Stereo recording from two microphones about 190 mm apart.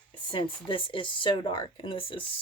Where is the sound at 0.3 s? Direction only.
25° left (ahead or behind).